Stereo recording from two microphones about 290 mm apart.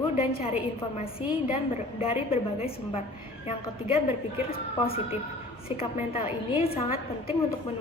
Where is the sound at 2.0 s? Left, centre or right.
Centre.